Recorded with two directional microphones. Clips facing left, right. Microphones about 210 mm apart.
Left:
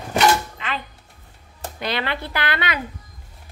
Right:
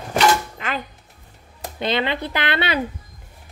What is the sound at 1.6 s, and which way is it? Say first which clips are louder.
A woman's voice: right 4 dB; 20° right (ahead or behind).